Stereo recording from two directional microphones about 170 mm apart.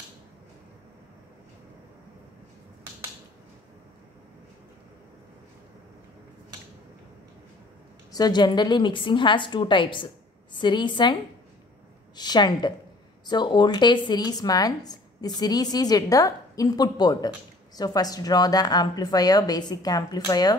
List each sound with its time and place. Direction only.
8.1 s speech: 25° left (ahead or behind)
12.2 s speech: 25° left (ahead or behind)